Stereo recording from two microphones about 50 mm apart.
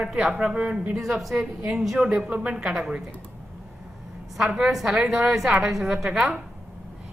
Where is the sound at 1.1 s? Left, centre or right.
Centre.